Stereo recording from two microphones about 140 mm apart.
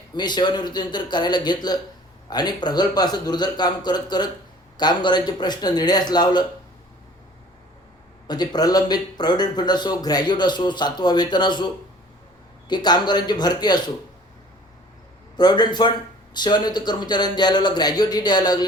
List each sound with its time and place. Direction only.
0.2 s speech: 30° left (ahead or behind)
8.3 s speech: 30° left (ahead or behind)
15.4 s speech: 30° left (ahead or behind)